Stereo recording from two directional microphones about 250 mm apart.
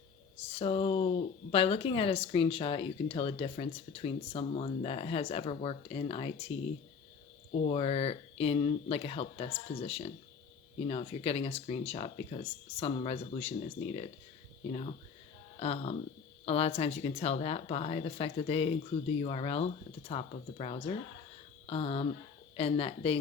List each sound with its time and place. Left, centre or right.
0.5 s speech: left
7.6 s speech: left
14.7 s speech: left